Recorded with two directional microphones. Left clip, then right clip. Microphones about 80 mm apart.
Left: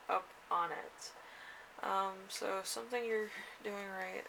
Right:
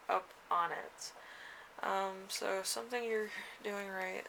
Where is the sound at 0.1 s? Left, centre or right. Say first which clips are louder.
Right 1 dB; right.